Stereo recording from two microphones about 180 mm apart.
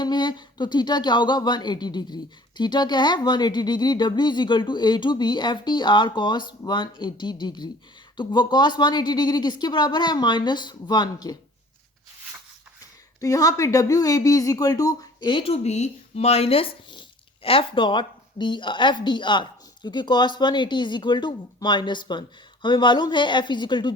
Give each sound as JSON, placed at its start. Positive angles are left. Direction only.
{"t": 0.0, "sound": "speech", "side_deg": 25}
{"t": 13.1, "sound": "speech", "side_deg": 20}